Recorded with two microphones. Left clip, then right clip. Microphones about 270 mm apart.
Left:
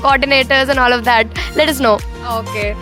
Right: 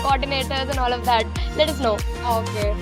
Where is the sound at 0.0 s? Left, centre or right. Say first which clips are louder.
Left 10 dB; left.